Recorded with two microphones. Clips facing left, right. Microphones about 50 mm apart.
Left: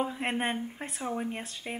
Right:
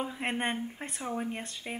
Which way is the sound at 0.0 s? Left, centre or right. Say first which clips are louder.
Left 2 dB; centre.